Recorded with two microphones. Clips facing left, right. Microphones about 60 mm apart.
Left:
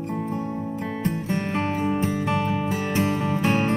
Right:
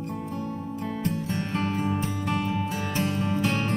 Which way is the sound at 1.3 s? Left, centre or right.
Left.